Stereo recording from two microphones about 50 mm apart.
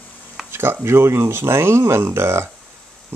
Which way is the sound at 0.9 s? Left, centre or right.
Right.